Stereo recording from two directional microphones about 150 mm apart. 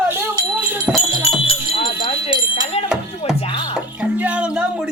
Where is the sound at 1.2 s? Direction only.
40° left (ahead or behind).